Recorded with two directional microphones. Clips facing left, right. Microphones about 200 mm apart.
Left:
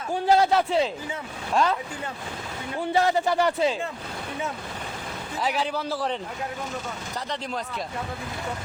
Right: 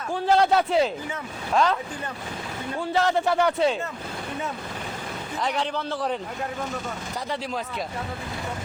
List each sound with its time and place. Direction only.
0.1 s a man's voice: 5° left (ahead or behind)
2.9 s speech: 15° left (ahead or behind)
3.2 s a man's voice: centre (ahead or behind)
5.4 s a man's voice: 5° left (ahead or behind)